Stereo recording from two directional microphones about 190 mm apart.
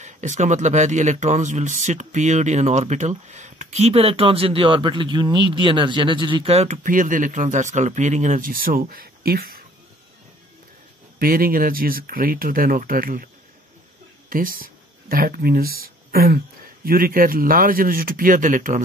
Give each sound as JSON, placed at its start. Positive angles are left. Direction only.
{"t": 0.0, "sound": "speech", "side_deg": -40}
{"t": 11.1, "sound": "speech", "side_deg": -50}
{"t": 14.3, "sound": "speech", "side_deg": -50}